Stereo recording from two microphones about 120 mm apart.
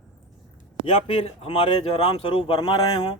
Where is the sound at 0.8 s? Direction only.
60° left (ahead or behind); by 3.0 s 40° left (ahead or behind).